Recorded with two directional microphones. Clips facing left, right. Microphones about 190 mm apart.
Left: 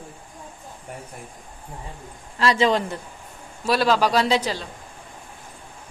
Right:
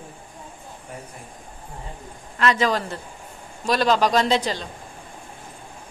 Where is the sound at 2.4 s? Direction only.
30° left (ahead or behind).